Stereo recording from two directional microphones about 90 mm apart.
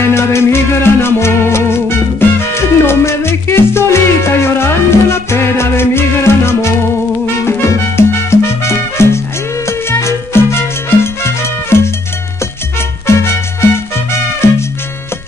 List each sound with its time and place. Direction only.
0.0 s music: 30° left (ahead or behind)
9.7 s salsa music: 30° left (ahead or behind)
13.0 s music: 30° left (ahead or behind)